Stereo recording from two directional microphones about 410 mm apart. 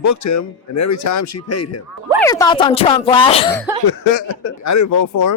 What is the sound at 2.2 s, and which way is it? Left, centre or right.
Speech, centre.